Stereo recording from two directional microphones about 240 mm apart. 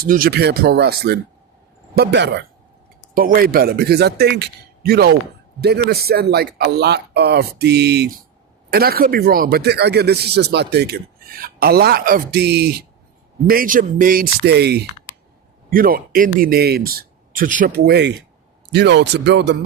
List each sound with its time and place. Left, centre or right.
0.0 s speech: right